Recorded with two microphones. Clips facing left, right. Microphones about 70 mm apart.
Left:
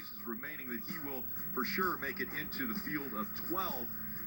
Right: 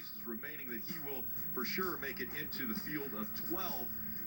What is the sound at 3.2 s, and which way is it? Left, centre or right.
Speech, left.